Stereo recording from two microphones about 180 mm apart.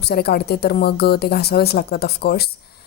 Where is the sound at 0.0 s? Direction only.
60° left (ahead or behind).